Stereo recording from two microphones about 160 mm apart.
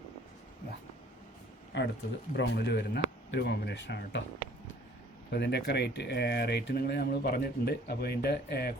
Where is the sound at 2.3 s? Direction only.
90° left.